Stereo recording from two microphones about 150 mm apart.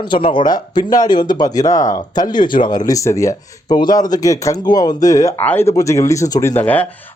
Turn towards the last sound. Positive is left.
turn(degrees=10)  # may be behind; listen again after turning